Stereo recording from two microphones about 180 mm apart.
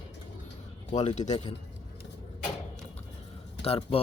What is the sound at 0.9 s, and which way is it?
Speech, 40° left (ahead or behind).